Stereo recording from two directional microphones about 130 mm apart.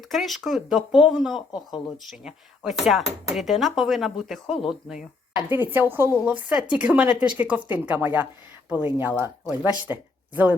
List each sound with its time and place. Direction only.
0.1 s speech: centre (ahead or behind)
5.5 s speech: 15° right (ahead or behind)